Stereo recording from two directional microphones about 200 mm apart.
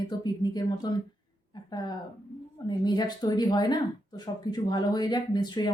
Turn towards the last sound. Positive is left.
turn(degrees=20)  # may be behind; listen again after turning